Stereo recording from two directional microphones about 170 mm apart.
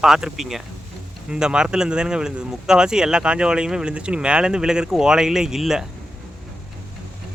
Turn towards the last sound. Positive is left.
turn(degrees=-5)  # may be behind; listen again after turning